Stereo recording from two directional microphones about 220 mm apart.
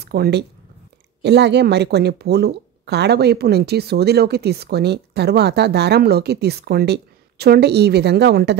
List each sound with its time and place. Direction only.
0.0 s speech: 45° right (ahead or behind)